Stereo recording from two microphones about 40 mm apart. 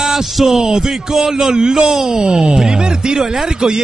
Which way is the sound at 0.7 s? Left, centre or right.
Centre.